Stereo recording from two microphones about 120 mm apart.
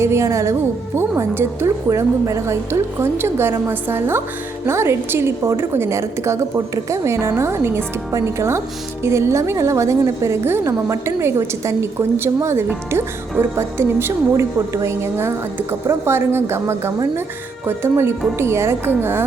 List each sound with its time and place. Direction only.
0.0 s a woman's voice: 25° right (ahead or behind)